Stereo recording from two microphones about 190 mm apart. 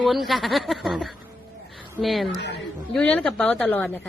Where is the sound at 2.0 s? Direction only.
Centre (ahead or behind).